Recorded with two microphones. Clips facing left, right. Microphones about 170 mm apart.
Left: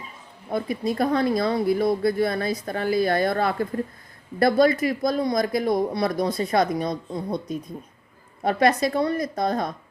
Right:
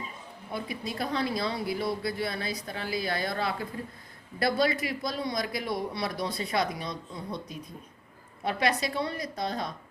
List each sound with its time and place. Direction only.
0.5 s speech: 45° left (ahead or behind)